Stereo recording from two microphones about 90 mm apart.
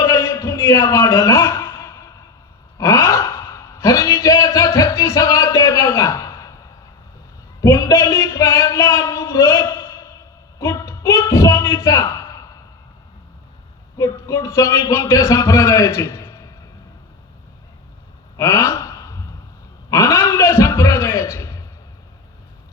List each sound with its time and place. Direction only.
0.0 s music: 35° left (ahead or behind)
2.7 s gasp: 35° left (ahead or behind)
4.2 s music: 35° left (ahead or behind)
7.6 s speech: 40° left (ahead or behind)
10.6 s a sound: 35° left (ahead or behind)
13.9 s a man's voice: 40° left (ahead or behind)
16.1 s a sound: 30° left (ahead or behind)
18.3 s a sound: 35° left (ahead or behind)
19.9 s a man's voice: 40° left (ahead or behind)